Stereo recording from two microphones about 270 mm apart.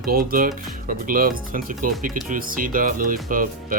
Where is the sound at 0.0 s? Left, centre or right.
Right.